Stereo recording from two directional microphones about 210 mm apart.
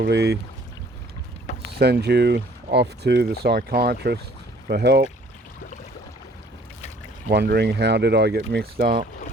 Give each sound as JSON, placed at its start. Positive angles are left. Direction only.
{"t": 0.0, "sound": "speech", "side_deg": -55}
{"t": 1.5, "sound": "vehicle", "side_deg": 35}
{"t": 1.8, "sound": "speech", "side_deg": -50}
{"t": 7.3, "sound": "speech", "side_deg": -50}